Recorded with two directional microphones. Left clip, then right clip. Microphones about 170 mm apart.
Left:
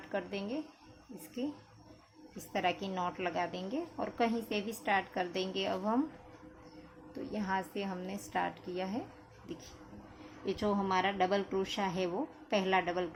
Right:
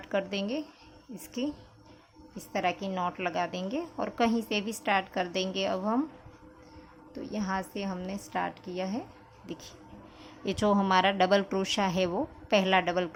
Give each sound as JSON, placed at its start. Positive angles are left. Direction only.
{"t": 0.1, "sound": "speech", "side_deg": -35}
{"t": 2.5, "sound": "a woman's voice", "side_deg": -20}
{"t": 7.1, "sound": "a woman's voice", "side_deg": -20}